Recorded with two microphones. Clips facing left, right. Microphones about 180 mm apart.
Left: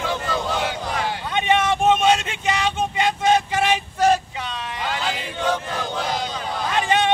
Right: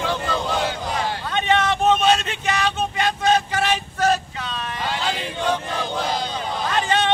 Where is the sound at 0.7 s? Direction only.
15° left (ahead or behind).